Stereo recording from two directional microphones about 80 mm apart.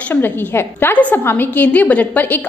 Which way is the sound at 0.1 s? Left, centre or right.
Left.